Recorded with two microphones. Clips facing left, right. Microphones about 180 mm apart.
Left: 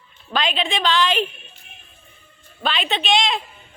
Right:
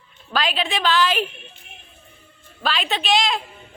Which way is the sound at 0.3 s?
Centre (ahead or behind).